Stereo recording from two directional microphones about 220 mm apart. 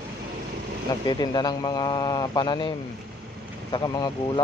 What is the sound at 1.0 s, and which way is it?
Speech, 20° left (ahead or behind).